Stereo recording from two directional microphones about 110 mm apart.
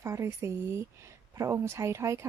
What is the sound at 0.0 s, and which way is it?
Speech, 25° right (ahead or behind).